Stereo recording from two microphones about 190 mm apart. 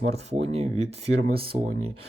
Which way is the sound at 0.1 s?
35° right (ahead or behind).